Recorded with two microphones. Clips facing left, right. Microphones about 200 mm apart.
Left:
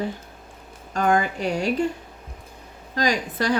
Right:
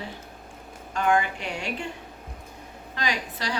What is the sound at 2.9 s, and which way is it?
Speech, 40° left (ahead or behind).